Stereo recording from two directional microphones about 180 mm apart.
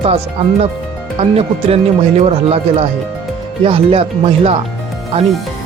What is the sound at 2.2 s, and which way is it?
Speech, 35° right (ahead or behind).